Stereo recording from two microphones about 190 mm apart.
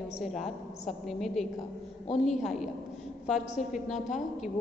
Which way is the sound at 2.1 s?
40° left (ahead or behind).